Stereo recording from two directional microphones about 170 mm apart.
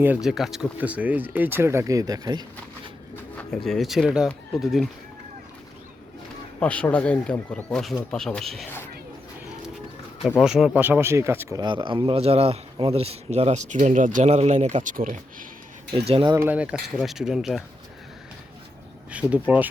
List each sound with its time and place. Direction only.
0.0 s speech: 5° right (ahead or behind); by 2.4 s 20° right (ahead or behind)
3.3 s speech: 5° left (ahead or behind)
6.6 s speech: 10° left (ahead or behind)
10.4 s speech: 5° right (ahead or behind); by 15.4 s 55° right (ahead or behind)
16.0 s speech: 35° right (ahead or behind)
16.3 s speech: 15° right (ahead or behind)
19.1 s speech: 10° right (ahead or behind)